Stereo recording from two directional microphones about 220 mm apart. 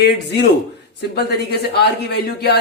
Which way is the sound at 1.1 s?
45° left (ahead or behind).